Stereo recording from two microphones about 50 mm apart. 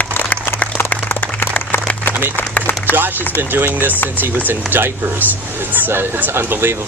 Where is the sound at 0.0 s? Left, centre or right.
Left.